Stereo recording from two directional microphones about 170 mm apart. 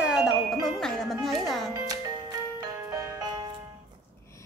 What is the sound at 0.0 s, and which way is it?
Music, 5° right (ahead or behind).